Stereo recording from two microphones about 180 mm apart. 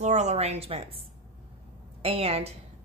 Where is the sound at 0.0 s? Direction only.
40° right (ahead or behind).